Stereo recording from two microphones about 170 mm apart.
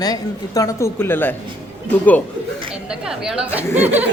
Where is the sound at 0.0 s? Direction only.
20° left (ahead or behind).